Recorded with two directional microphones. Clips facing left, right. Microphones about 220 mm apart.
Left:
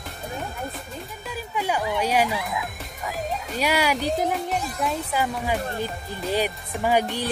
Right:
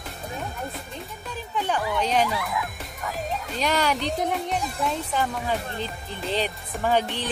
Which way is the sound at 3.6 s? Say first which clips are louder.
Left 1 dB; 10° left (ahead or behind).